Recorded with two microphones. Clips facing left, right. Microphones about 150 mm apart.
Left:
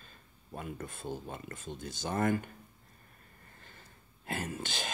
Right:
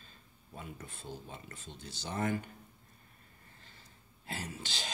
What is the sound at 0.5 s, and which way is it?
Speech, 50° left (ahead or behind).